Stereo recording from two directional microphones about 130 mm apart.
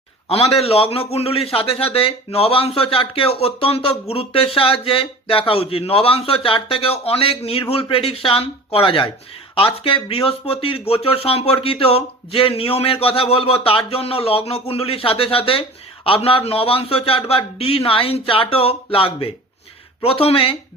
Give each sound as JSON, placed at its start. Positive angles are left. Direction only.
{"t": 0.3, "sound": "a man's voice", "side_deg": 50}